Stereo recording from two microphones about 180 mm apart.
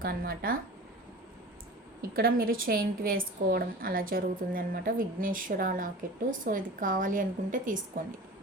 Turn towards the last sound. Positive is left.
turn(degrees=-45)  # may be behind; listen again after turning